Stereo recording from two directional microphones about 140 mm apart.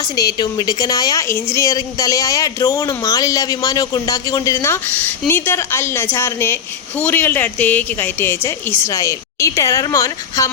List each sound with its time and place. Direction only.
0.0 s a woman's voice: 25° left (ahead or behind)